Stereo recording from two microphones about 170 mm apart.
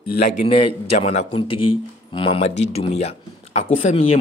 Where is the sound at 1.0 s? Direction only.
40° left (ahead or behind).